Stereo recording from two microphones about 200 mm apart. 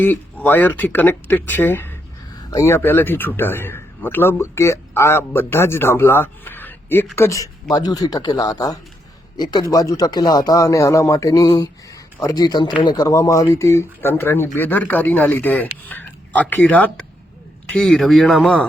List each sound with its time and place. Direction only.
0.0 s a man's voice: 10° left (ahead or behind)